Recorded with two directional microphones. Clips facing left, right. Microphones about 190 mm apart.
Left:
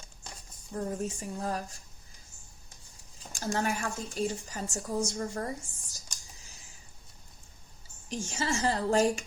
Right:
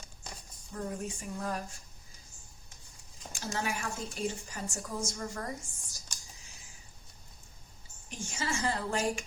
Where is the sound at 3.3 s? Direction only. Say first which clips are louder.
Left 5 dB; 45° left (ahead or behind).